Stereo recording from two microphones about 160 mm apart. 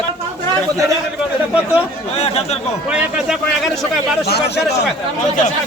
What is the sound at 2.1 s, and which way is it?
Speech, 40° left (ahead or behind).